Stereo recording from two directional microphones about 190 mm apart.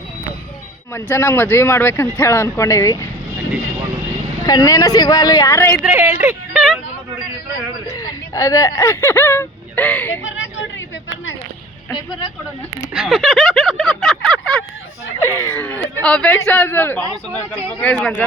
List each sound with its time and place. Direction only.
0.9 s speech: 15° left (ahead or behind)
4.4 s speech: 20° left (ahead or behind)
5.8 s a woman's voice: 10° right (ahead or behind)
7.9 s speech: 20° left (ahead or behind)
12.9 s a sound: 5° right (ahead or behind)
15.2 s speech: 15° left (ahead or behind)
17.0 s speech: 20° right (ahead or behind)
17.7 s speech: 5° left (ahead or behind)